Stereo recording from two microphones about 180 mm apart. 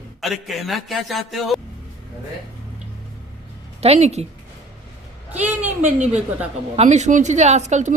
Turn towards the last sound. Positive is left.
turn(degrees=-40)  # may be behind; listen again after turning